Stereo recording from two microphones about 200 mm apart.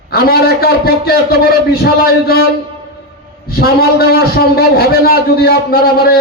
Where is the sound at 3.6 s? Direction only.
50° left (ahead or behind).